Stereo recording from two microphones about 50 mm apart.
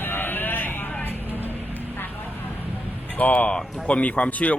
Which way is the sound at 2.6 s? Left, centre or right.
Left.